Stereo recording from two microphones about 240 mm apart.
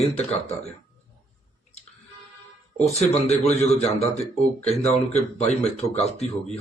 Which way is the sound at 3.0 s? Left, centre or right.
Left.